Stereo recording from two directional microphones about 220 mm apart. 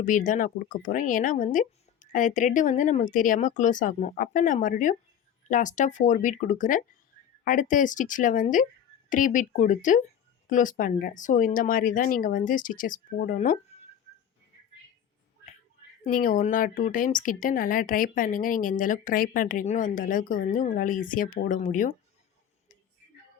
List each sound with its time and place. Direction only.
0.0 s speech: 35° left (ahead or behind)
16.0 s speech: 40° left (ahead or behind)